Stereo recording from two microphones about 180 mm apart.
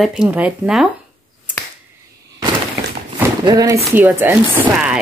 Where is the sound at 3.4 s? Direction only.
20° right (ahead or behind).